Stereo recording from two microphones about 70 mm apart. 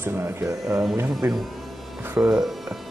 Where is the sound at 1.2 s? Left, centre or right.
Right.